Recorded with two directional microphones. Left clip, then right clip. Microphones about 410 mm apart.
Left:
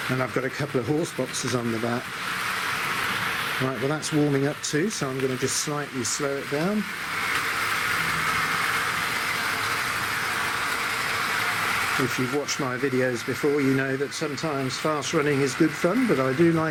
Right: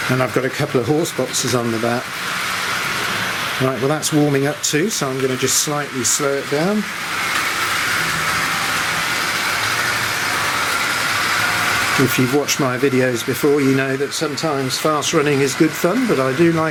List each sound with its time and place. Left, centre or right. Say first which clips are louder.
15.9 s speech: right 6 dB; centre